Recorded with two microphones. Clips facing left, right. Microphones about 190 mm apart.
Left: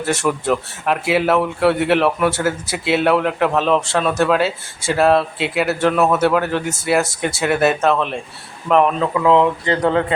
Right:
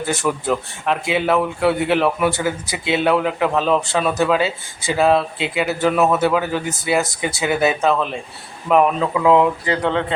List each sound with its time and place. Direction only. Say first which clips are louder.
0.0 s speech: left 2 dB; centre (ahead or behind)
9.8 s speech: left 4 dB; 5° left (ahead or behind)